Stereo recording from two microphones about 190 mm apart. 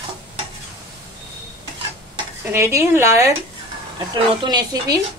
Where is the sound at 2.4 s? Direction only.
15° right (ahead or behind).